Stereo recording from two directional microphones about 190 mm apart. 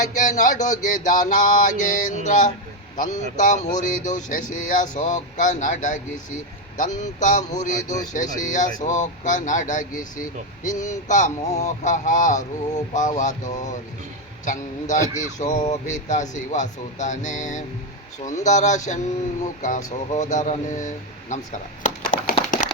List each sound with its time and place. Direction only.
0.0 s a man's voice: 40° left (ahead or behind)
7.0 s a man's voice: 40° left (ahead or behind)
21.8 s a sound: 45° left (ahead or behind)